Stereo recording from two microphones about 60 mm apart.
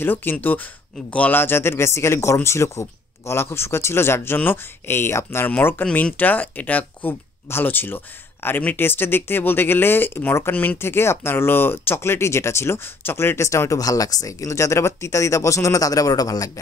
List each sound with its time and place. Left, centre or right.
0.0 s speech: left
10.5 s speech: left
10.8 s speech: left